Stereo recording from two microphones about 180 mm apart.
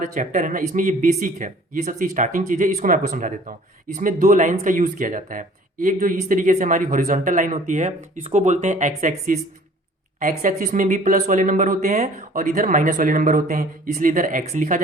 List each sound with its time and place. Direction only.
0.0 s speech: 45° right (ahead or behind)